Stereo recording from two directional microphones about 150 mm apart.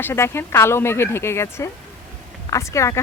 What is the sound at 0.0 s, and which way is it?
Speech, 15° left (ahead or behind).